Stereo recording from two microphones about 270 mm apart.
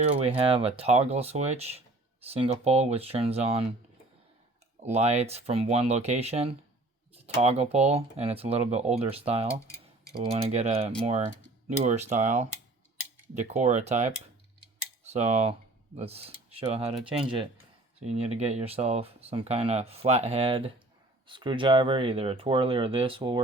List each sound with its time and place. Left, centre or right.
0.1 s speech: right
4.8 s speech: right
9.6 s tick-tock: centre
10.1 s speech: right